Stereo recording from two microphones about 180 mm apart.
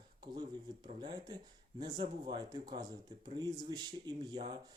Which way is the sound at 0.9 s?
25° right (ahead or behind).